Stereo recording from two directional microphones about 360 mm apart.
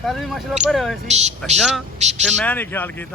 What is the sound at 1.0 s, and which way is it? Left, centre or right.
Speech, centre.